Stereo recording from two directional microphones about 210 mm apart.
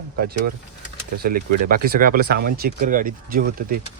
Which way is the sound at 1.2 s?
45° right (ahead or behind).